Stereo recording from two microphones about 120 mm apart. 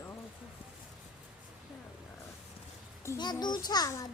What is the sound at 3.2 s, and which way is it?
Speech, 35° left (ahead or behind).